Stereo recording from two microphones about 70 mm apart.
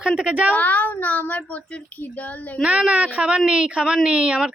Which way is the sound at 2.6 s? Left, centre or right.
Centre.